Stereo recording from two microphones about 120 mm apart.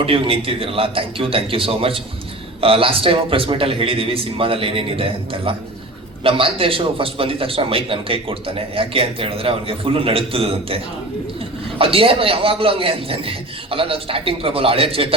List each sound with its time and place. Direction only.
0.0 s a man's voice: 50° right (ahead or behind)
11.8 s a man's voice: 50° right (ahead or behind)